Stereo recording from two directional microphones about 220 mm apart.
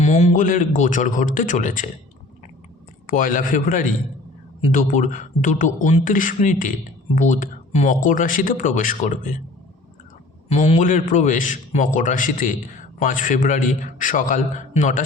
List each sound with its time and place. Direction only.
0.0 s a man's voice: 30° left (ahead or behind)
3.1 s a man's voice: 40° left (ahead or behind)
10.5 s a man's voice: 30° left (ahead or behind)